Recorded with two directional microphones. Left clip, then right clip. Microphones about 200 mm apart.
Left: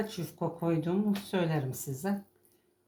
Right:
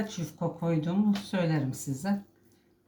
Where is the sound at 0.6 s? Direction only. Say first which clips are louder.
Even; 30° left (ahead or behind).